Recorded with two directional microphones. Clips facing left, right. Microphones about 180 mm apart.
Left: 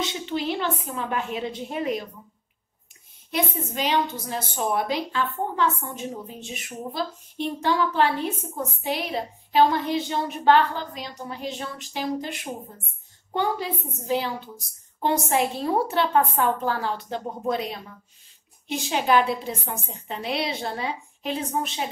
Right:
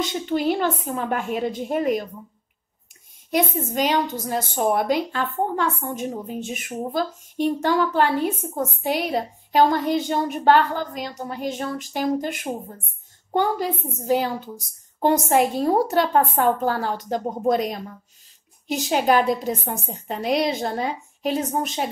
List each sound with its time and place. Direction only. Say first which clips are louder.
0.0 s a woman's voice: right 5 dB; 45° right (ahead or behind)
3.3 s a woman's voice: right 5 dB; 45° right (ahead or behind)